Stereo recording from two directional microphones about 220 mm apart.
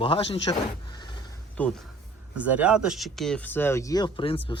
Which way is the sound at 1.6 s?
5° left (ahead or behind).